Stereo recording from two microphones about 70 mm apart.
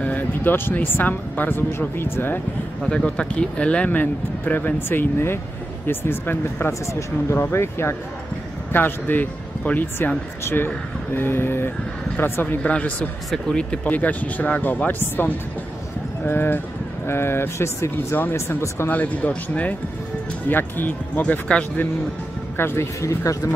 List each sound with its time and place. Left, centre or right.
0.0 s speech: left
2.8 s speech: centre; by 6.7 s left
6.9 s speech: left
12.6 s speech: centre
13.8 s speech: left
18.9 s speech: left
22.6 s speech: left
22.9 s speech: left